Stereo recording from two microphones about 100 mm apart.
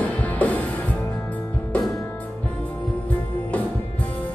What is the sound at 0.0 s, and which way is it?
Music, 15° left (ahead or behind).